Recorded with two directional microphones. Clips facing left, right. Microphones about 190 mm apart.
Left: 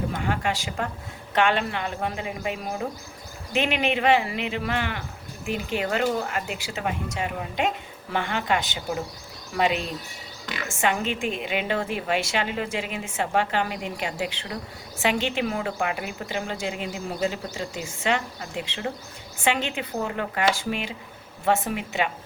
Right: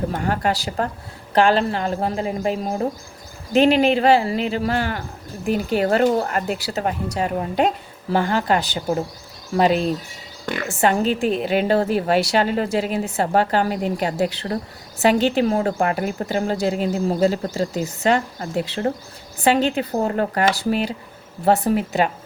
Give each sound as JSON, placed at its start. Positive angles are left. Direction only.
{"t": 0.1, "sound": "a woman's voice", "side_deg": -40}
{"t": 10.4, "sound": "speech", "side_deg": -55}
{"t": 10.8, "sound": "a woman's voice", "side_deg": -35}